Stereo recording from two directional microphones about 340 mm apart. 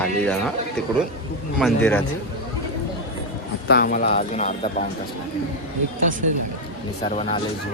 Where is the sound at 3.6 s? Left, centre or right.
Left.